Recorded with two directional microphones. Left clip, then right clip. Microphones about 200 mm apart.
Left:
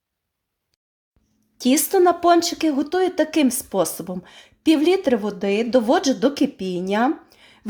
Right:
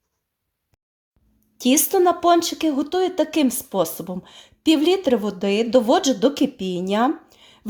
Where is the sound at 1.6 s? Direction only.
Centre (ahead or behind).